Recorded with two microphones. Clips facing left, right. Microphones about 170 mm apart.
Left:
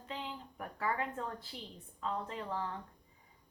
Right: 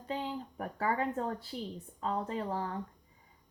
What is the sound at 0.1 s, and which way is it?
Speech, 35° right (ahead or behind).